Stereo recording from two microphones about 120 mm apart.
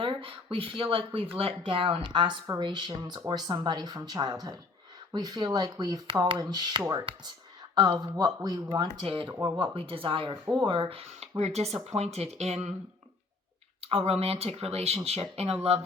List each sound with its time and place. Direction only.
0.0 s speech: 45° right (ahead or behind); by 12.7 s 65° right (ahead or behind)
13.8 s speech: 55° right (ahead or behind)